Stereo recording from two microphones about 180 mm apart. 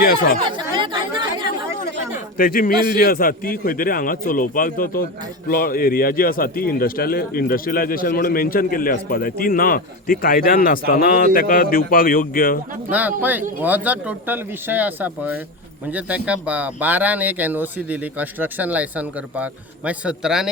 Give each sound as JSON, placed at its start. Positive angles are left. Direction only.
{"t": 0.5, "sound": "chatter", "side_deg": -25}
{"t": 2.4, "sound": "a man's voice", "side_deg": 55}
{"t": 12.9, "sound": "speech", "side_deg": -10}